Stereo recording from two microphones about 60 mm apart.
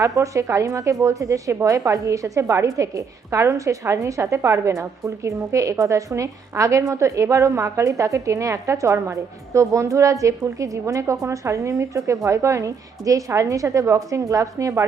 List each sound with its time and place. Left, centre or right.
0.0 s a woman's voice: right